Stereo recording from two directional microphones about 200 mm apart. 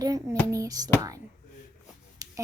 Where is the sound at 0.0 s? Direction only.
15° right (ahead or behind).